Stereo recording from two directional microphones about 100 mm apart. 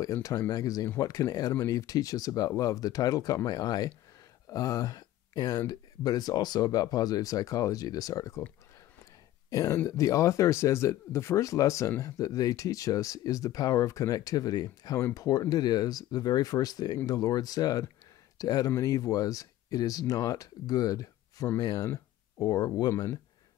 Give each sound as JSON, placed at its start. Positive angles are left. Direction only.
{"t": 0.0, "sound": "speech", "side_deg": 35}
{"t": 9.5, "sound": "speech", "side_deg": 35}
{"t": 21.8, "sound": "a sound", "side_deg": 30}
{"t": 22.8, "sound": "speech", "side_deg": 40}